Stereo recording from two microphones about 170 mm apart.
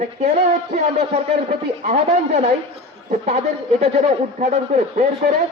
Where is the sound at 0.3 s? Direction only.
40° right (ahead or behind).